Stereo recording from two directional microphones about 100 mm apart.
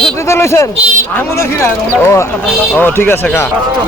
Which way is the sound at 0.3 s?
25° left (ahead or behind).